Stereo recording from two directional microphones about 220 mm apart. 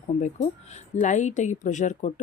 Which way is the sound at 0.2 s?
30° left (ahead or behind).